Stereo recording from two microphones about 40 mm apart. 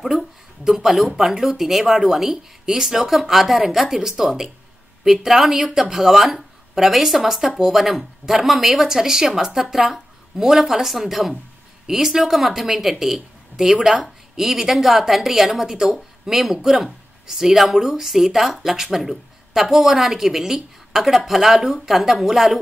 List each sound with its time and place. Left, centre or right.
0.0 s speech: centre